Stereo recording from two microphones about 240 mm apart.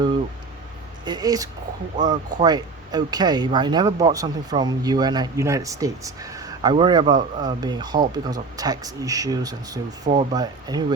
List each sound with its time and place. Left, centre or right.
1.0 s speech: centre